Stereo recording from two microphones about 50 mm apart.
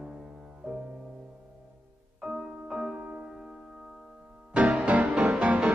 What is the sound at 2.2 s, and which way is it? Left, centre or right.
Music, centre.